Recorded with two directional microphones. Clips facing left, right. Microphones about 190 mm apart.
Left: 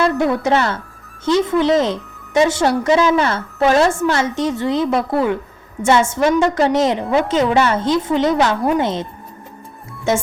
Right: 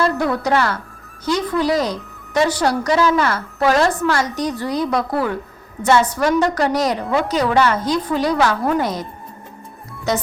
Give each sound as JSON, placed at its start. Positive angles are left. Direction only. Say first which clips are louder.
{"t": 0.2, "sound": "speech", "louder": "left 2 dB", "side_deg": 20}